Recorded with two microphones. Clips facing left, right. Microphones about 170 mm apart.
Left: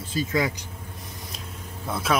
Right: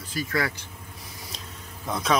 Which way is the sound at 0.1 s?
20° left (ahead or behind).